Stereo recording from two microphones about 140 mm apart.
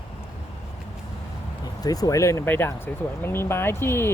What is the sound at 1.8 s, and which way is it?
Speech, 25° left (ahead or behind).